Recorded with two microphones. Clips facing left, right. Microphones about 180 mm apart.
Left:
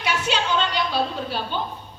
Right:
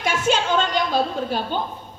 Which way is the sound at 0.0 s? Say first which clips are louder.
Right 3 dB; 45° right (ahead or behind).